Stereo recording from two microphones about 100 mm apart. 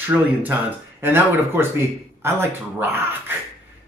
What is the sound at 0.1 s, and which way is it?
A man's voice, 15° right (ahead or behind).